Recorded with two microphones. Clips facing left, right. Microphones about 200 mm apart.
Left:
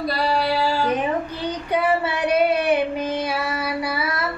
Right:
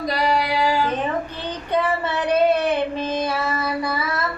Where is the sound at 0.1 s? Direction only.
15° right (ahead or behind).